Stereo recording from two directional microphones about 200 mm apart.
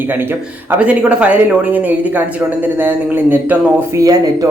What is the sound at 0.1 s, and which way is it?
Speech, 10° right (ahead or behind).